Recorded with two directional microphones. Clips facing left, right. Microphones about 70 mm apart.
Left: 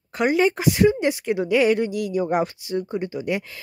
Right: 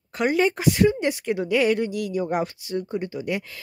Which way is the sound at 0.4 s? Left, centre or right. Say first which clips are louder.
Left 1 dB; centre.